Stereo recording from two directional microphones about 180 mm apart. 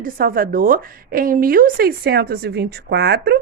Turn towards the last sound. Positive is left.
turn(degrees=-60)  # may be behind; listen again after turning